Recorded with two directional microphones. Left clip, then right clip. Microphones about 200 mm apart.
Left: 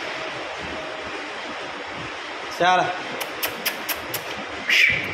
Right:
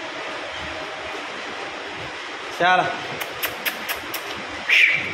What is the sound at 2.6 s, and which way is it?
Speech, centre (ahead or behind).